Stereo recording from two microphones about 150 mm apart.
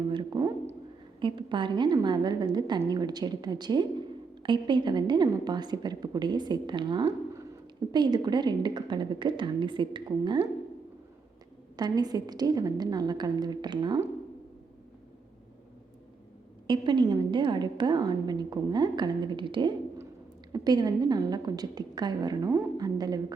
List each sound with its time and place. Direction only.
0.1 s a woman's voice: 30° right (ahead or behind)
11.8 s a woman's voice: 25° right (ahead or behind)
16.6 s a woman's voice: 30° right (ahead or behind)